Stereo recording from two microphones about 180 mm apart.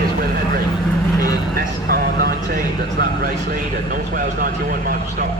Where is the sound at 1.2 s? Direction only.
55° right (ahead or behind).